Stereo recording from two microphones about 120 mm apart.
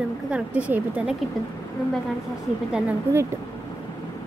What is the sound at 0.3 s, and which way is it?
Speech, 10° right (ahead or behind).